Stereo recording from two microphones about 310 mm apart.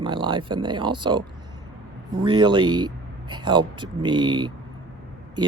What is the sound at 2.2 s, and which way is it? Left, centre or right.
Speech, centre.